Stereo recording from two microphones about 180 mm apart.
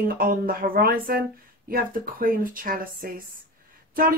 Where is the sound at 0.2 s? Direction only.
50° right (ahead or behind).